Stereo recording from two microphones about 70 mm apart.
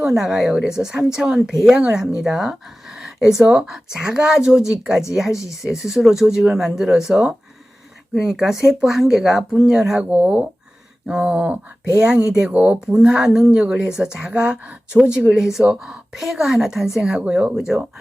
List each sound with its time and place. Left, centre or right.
0.0 s speech: centre
10.0 s speech: right
12.5 s speech: right
12.9 s speech: centre